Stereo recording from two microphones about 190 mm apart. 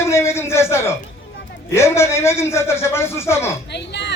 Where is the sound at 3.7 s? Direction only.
65° left (ahead or behind).